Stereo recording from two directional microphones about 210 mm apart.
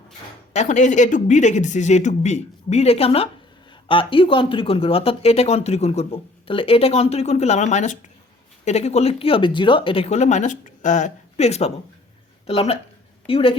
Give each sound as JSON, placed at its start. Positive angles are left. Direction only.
{"t": 0.5, "sound": "speech", "side_deg": 35}